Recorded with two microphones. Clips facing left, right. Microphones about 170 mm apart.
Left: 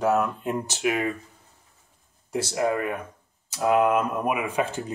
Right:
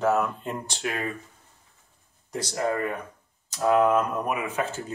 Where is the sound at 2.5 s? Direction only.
10° left (ahead or behind).